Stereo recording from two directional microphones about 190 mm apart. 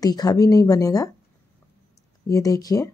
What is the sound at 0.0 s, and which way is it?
Speech, 20° left (ahead or behind).